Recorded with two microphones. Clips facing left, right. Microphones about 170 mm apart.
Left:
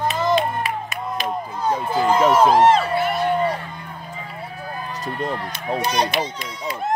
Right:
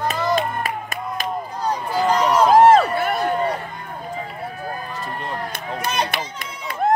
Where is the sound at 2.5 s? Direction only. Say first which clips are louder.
Right 3 dB; 50° right (ahead or behind).